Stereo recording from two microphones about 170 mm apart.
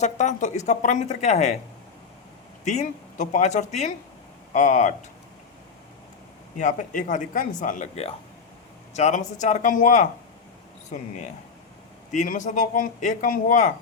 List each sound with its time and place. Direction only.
0.0 s speech: 45° left (ahead or behind)
2.6 s speech: 45° left (ahead or behind)
6.6 s speech: 50° left (ahead or behind)
12.1 s speech: 45° left (ahead or behind)